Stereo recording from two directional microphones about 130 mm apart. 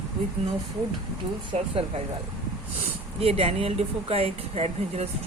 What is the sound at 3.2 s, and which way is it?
Speech, 45° right (ahead or behind).